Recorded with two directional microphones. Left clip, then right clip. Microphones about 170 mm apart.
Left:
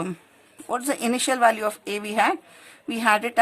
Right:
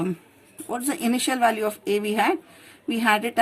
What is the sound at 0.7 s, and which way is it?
Speech, 20° left (ahead or behind).